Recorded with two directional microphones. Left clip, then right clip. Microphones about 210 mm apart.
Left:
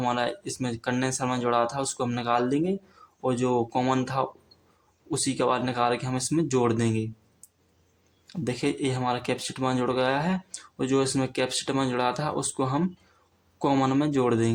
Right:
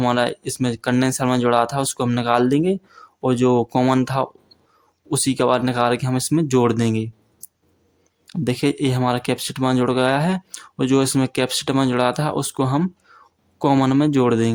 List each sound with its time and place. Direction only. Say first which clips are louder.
0.0 s speech: right 7 dB; 40° right (ahead or behind)
8.3 s speech: right 7 dB; 40° right (ahead or behind)